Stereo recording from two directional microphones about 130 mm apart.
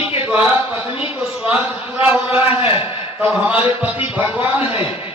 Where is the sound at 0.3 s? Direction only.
15° right (ahead or behind).